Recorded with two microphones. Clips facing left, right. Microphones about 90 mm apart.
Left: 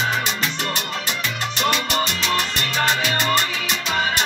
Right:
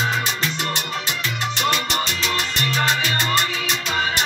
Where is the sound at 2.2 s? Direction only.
20° left (ahead or behind).